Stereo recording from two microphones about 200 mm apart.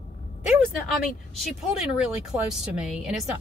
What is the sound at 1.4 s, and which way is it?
Speech, 5° right (ahead or behind).